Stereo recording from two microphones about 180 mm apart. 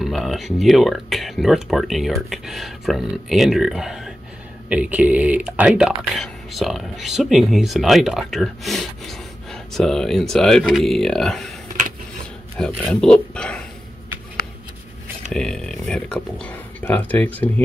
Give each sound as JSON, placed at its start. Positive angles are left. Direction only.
{"t": 0.0, "sound": "speech", "side_deg": 0}
{"t": 12.5, "sound": "speech", "side_deg": 5}
{"t": 15.3, "sound": "speech", "side_deg": 5}